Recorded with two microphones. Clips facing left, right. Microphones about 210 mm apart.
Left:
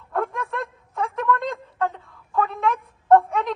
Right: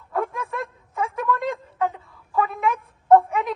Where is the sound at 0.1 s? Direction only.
Centre (ahead or behind).